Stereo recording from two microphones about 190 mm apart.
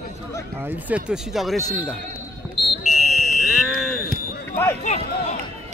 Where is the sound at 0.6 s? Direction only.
10° right (ahead or behind).